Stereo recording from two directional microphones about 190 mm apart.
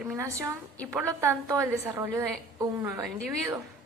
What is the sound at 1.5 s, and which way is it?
A woman's voice, 15° right (ahead or behind).